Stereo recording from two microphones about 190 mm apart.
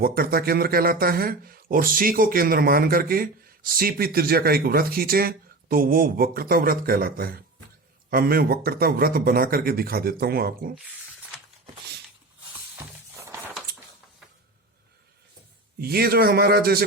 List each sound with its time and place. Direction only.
0.0 s speech: 50° right (ahead or behind)
12.7 s music: 15° right (ahead or behind)
15.8 s speech: 55° right (ahead or behind)